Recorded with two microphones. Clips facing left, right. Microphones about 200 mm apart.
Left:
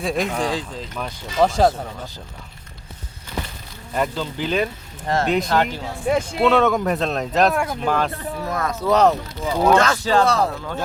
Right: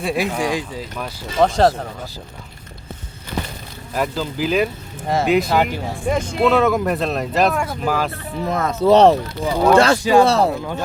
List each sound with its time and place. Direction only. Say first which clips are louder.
0.0 s speech: right 1 dB; 5° right (ahead or behind)
3.9 s speech: right 1 dB; 5° right (ahead or behind)
6.0 s speech: even; 5° left (ahead or behind)
8.4 s speech: right 6 dB; 25° right (ahead or behind)
10.0 s speech: right 5 dB; 10° right (ahead or behind)
10.2 s speech: right 3 dB; 25° right (ahead or behind)
10.5 s speech: right 5 dB; 15° right (ahead or behind)